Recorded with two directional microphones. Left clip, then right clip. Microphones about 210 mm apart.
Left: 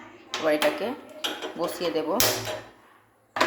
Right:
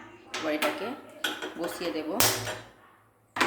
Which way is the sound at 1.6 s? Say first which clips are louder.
Left 8 dB; 15° left (ahead or behind).